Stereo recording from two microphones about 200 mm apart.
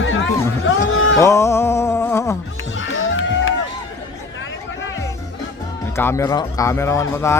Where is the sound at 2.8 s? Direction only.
70° left (ahead or behind).